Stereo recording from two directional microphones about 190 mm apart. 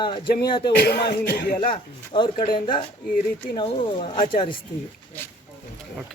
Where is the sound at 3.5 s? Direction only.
30° left (ahead or behind).